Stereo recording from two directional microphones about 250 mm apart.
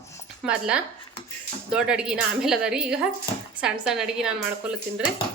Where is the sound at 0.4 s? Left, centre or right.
Centre.